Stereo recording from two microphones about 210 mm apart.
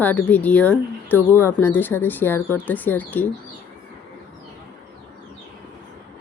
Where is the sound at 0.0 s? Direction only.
10° left (ahead or behind).